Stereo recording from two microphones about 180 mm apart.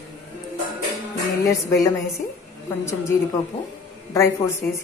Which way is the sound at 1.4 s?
20° left (ahead or behind).